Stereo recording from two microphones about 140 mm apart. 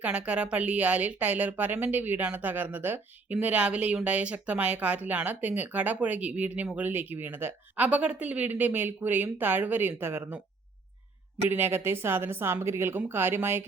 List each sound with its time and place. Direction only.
0.0 s speech: 10° right (ahead or behind)
11.4 s speech: 15° right (ahead or behind)